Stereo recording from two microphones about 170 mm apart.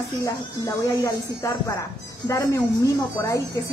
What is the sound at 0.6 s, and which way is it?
Speech, 20° left (ahead or behind).